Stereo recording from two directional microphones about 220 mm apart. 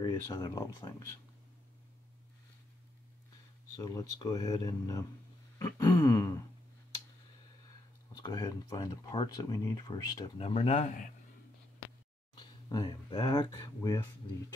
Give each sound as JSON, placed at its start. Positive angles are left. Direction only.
{"t": 0.0, "sound": "speech", "side_deg": 15}
{"t": 3.7, "sound": "speech", "side_deg": 15}
{"t": 8.1, "sound": "speech", "side_deg": 20}
{"t": 12.4, "sound": "speech", "side_deg": 20}